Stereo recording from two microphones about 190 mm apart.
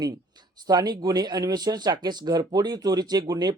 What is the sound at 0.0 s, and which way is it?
Speech, 20° right (ahead or behind).